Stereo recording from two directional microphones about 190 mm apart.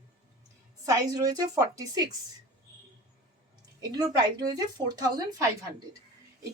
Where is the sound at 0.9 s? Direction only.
20° right (ahead or behind).